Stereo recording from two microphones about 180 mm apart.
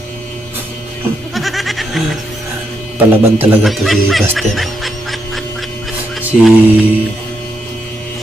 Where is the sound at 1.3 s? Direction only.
Centre (ahead or behind).